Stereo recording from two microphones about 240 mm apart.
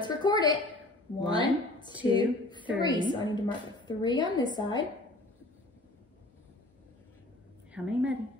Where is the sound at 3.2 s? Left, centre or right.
Centre.